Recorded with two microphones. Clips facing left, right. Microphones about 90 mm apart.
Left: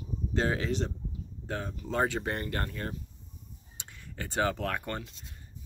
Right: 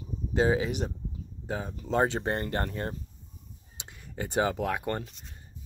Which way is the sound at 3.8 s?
20° right (ahead or behind).